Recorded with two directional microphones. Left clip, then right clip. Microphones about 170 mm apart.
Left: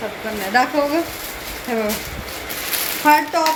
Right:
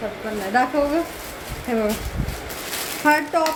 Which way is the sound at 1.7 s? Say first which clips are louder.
Left 1 dB; 15° right (ahead or behind).